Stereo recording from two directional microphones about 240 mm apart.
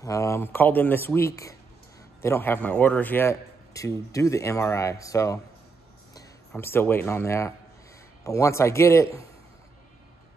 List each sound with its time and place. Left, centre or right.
0.0 s a man's voice: centre